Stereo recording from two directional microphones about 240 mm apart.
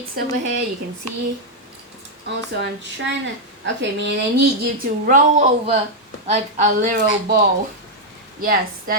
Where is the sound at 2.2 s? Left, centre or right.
Right.